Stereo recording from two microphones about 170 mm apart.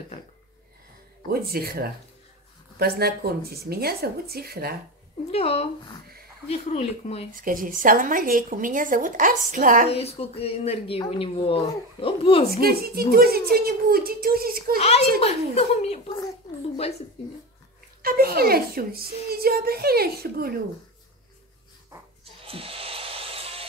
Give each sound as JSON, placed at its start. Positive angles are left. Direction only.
{"t": 1.3, "sound": "a child's voice", "side_deg": -65}
{"t": 5.3, "sound": "speech", "side_deg": 35}
{"t": 7.3, "sound": "speech", "side_deg": -55}
{"t": 9.8, "sound": "speech", "side_deg": 35}
{"t": 12.4, "sound": "a child's voice", "side_deg": -60}
{"t": 14.8, "sound": "speech", "side_deg": 35}
{"t": 18.0, "sound": "a child's voice", "side_deg": -60}
{"t": 22.2, "sound": "music", "side_deg": -35}